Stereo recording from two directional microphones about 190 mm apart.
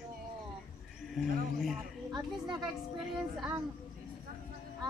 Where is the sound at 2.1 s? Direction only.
25° right (ahead or behind).